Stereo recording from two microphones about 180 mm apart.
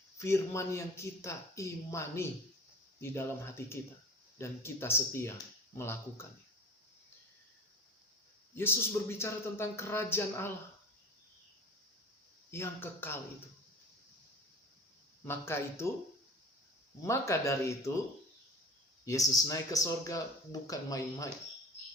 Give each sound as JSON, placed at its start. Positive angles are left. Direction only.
{"t": 0.2, "sound": "speech", "side_deg": 15}
{"t": 8.5, "sound": "speech", "side_deg": 15}
{"t": 12.5, "sound": "speech", "side_deg": 10}
{"t": 15.2, "sound": "speech", "side_deg": 15}
{"t": 17.0, "sound": "speech", "side_deg": 15}
{"t": 19.3, "sound": "speech", "side_deg": 20}